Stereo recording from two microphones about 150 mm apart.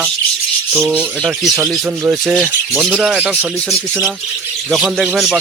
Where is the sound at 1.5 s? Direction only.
15° right (ahead or behind).